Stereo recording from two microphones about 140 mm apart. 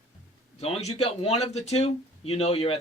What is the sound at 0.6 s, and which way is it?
A man's voice, 50° left (ahead or behind).